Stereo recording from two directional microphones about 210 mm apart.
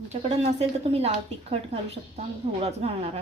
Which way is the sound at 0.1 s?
30° right (ahead or behind).